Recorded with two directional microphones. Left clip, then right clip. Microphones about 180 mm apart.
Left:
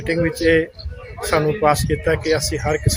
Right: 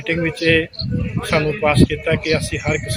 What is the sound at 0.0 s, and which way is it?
Speech, 5° left (ahead or behind).